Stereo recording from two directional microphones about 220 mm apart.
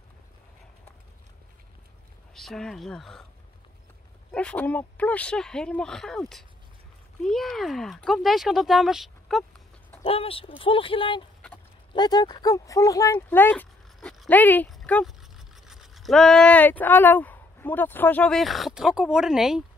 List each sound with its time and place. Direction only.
2.3 s speech: centre (ahead or behind)
4.3 s speech: 5° left (ahead or behind)
10.0 s speech: 25° left (ahead or behind); by 19.6 s centre (ahead or behind)